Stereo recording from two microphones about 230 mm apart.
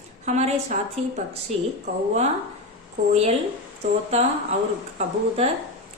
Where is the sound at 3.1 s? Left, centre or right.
Right.